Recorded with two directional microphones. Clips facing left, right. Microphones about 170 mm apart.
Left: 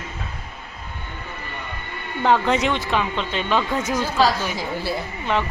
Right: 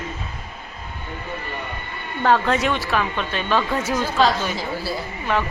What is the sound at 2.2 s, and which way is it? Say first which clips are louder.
A woman's voice: even; 15° left (ahead or behind).